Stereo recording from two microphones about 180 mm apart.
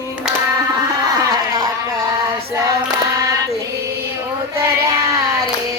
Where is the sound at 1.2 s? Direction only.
20° right (ahead or behind).